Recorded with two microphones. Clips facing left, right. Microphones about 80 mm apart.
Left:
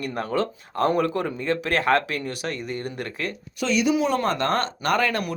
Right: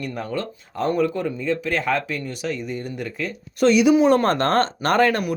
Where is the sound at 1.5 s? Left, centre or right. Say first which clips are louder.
Left 2 dB; left.